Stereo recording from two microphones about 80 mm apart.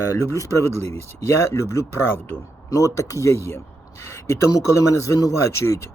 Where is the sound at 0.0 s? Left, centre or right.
Left.